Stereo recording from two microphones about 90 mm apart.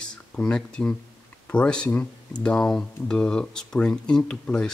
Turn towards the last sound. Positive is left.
turn(degrees=10)  # may be behind; listen again after turning